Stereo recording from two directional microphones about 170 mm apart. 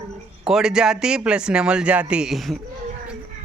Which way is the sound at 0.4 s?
5° right (ahead or behind).